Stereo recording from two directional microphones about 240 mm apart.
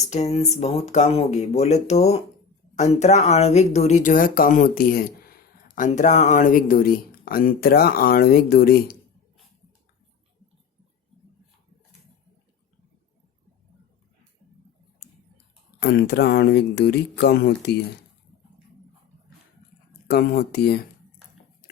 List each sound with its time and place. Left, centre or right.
0.1 s speech: left
15.8 s speech: left
20.1 s speech: left